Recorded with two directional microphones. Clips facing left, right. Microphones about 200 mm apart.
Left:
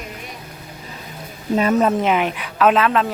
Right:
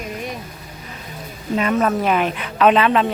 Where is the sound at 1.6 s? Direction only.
35° left (ahead or behind).